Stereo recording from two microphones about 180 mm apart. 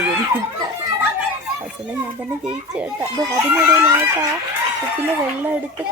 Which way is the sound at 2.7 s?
10° right (ahead or behind).